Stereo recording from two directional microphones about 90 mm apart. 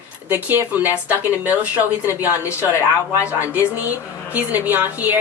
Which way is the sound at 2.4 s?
30° left (ahead or behind).